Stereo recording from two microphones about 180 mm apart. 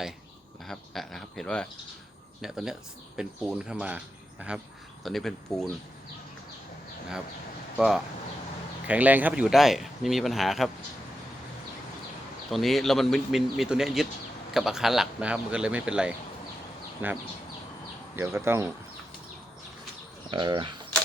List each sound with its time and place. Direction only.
0.6 s speech: centre (ahead or behind)
7.8 s speech: centre (ahead or behind)
12.5 s speech: centre (ahead or behind)
18.2 s speech: 15° right (ahead or behind)
20.3 s speech: 25° right (ahead or behind)